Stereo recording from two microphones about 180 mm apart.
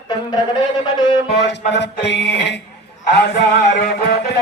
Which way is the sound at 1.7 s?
75° left (ahead or behind).